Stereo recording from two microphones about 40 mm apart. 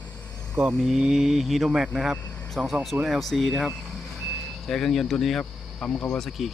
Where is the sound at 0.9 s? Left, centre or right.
Centre.